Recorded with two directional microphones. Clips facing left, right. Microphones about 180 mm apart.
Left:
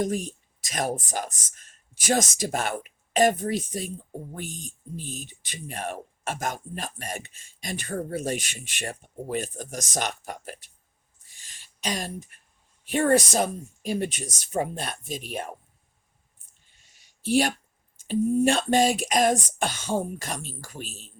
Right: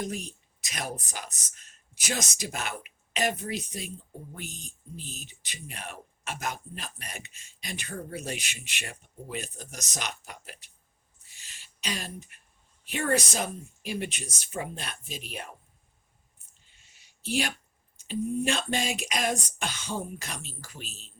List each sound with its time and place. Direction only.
0.0 s speech: 45° left (ahead or behind)
12.9 s speech: 50° left (ahead or behind)
18.1 s speech: 50° left (ahead or behind)